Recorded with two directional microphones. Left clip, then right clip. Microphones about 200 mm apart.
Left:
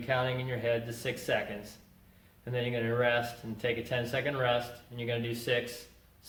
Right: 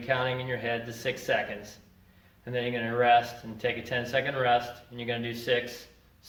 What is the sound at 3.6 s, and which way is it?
Speech, 15° left (ahead or behind).